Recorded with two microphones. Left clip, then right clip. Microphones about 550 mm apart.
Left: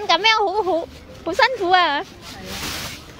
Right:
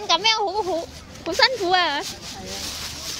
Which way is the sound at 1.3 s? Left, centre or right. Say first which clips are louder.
Left 2 dB; left.